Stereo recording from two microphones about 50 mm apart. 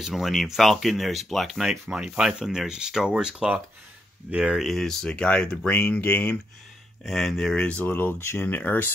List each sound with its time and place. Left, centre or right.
0.0 s speech: centre
1.9 s speech: centre
4.7 s speech: centre
5.1 s speech: left
5.7 s speech: left
7.1 s speech: centre
7.5 s speech: left
7.9 s speech: left
8.5 s speech: left